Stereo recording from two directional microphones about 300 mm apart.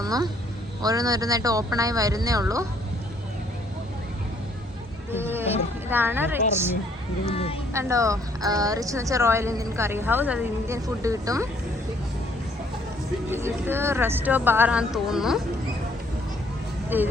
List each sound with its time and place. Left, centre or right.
0.0 s a woman's voice: centre
5.1 s a woman's voice: centre
7.3 s speech: centre
7.7 s a woman's voice: centre
13.3 s a woman's voice: centre
16.9 s a woman's voice: centre